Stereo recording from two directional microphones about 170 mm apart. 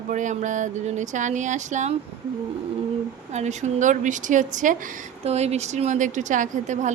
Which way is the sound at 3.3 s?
45° right (ahead or behind).